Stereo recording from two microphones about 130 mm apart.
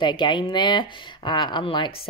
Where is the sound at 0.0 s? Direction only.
35° left (ahead or behind).